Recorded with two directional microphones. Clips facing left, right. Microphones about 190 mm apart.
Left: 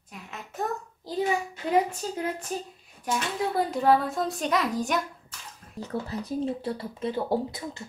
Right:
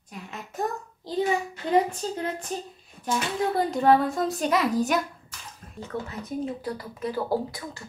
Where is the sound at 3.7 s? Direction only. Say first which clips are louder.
Right 3 dB; centre (ahead or behind).